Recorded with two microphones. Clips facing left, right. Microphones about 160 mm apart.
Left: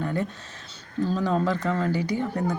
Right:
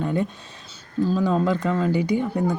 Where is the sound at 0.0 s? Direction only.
20° right (ahead or behind).